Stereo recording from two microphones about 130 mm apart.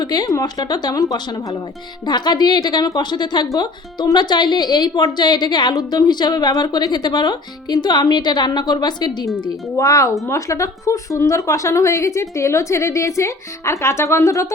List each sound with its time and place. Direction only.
0.0 s a woman's voice: 30° left (ahead or behind)